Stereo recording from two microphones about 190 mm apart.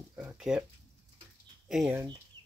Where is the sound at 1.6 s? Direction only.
5° right (ahead or behind).